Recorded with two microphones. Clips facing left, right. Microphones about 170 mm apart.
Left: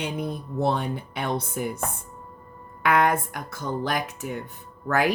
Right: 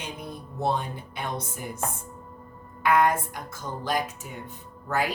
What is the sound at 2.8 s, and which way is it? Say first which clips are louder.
A woman's voice: left 1 dB; 65° left (ahead or behind).